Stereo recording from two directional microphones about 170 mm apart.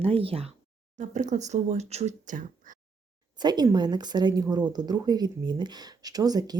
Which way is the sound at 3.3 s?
25° right (ahead or behind).